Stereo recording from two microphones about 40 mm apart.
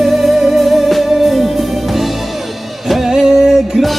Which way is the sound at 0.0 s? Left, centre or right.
Centre.